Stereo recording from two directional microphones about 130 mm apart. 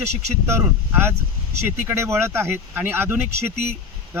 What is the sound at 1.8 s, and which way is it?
Speech, 20° right (ahead or behind).